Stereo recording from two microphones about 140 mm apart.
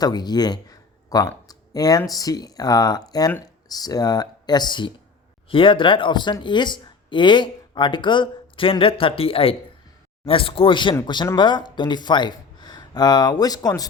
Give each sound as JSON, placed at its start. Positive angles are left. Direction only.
{"t": 0.0, "sound": "speech", "side_deg": 30}